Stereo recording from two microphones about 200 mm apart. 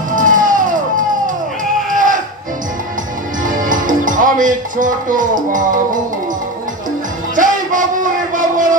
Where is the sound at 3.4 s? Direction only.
40° right (ahead or behind).